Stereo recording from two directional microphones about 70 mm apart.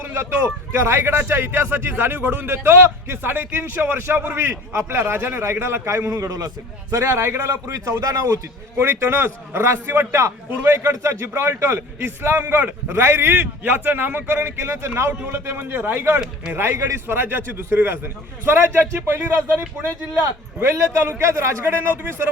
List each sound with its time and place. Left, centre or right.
0.0 s a man's voice: right
6.1 s a man's voice: right
6.9 s a man's voice: right
8.8 s a man's voice: right
10.5 s a man's voice: right
10.9 s a man's voice: right
20.6 s a man's voice: right